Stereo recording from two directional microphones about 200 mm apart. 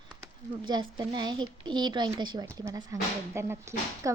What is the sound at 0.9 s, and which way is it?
Speech, 20° right (ahead or behind).